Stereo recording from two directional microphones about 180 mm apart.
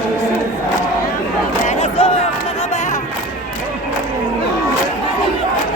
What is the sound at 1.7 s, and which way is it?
Battle cry, 30° left (ahead or behind).